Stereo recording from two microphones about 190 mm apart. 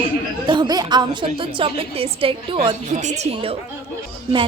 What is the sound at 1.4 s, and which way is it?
A woman's voice, 30° right (ahead or behind).